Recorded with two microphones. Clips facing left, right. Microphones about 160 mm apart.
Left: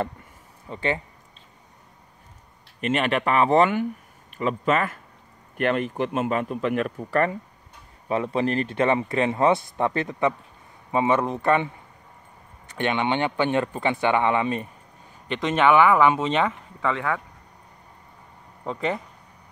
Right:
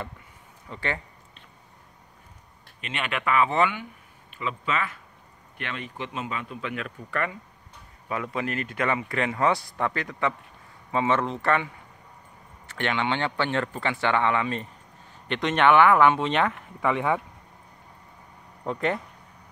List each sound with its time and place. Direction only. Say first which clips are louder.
0.7 s speech: left 5 dB; 20° left (ahead or behind)
2.8 s speech: left 8 dB; 40° left (ahead or behind)
8.1 s speech: left 6 dB; 30° left (ahead or behind)
15.2 s speech: left 1 dB; centre (ahead or behind)
16.8 s speech: right 1 dB; 20° right (ahead or behind)
18.6 s speech: even; centre (ahead or behind)